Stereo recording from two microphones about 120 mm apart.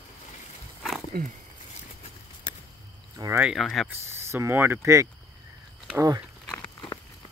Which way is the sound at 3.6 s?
5° left (ahead or behind).